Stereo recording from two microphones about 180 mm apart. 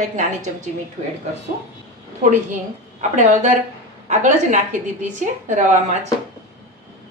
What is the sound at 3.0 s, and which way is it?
A woman's voice, 40° right (ahead or behind).